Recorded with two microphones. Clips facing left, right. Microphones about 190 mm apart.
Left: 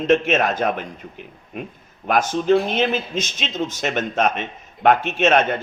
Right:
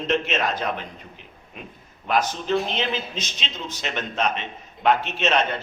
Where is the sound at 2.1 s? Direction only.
50° left (ahead or behind).